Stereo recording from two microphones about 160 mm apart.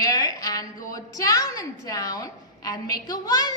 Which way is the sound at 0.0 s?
25° left (ahead or behind).